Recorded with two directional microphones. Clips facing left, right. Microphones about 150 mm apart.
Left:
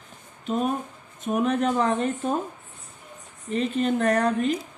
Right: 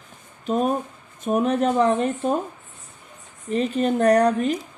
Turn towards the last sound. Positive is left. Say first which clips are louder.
# right 4 dB
turn(degrees=-40)  # may be behind; listen again after turning